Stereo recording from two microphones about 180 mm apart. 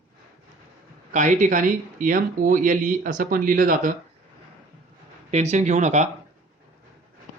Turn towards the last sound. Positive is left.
turn(degrees=-40)  # may be behind; listen again after turning